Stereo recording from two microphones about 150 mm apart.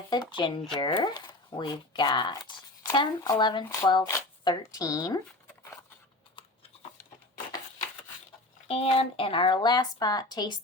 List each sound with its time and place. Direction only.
0.1 s speech: 30° left (ahead or behind)
8.6 s speech: 40° left (ahead or behind)